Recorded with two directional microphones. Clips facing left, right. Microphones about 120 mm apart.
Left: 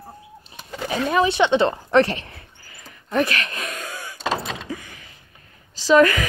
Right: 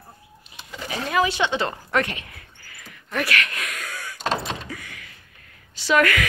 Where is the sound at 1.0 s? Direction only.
25° left (ahead or behind).